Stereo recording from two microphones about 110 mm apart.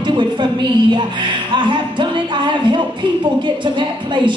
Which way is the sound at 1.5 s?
45° right (ahead or behind).